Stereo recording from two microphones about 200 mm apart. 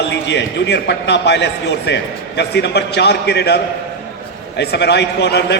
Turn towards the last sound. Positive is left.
turn(degrees=55)  # may be behind; listen again after turning